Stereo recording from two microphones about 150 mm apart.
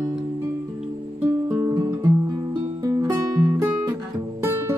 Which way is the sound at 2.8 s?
20° right (ahead or behind).